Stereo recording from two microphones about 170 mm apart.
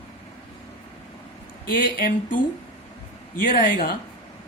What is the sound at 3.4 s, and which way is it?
Speech, 55° left (ahead or behind).